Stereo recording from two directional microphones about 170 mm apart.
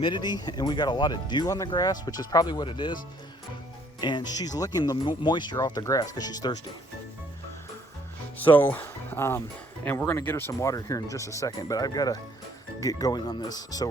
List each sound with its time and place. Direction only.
0.0 s speech: 25° left (ahead or behind)
4.0 s speech: 25° left (ahead or behind)
8.5 s speech: 10° left (ahead or behind)